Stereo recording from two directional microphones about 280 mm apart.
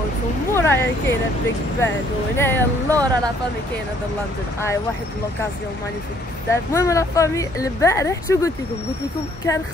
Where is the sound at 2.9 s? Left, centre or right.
Centre.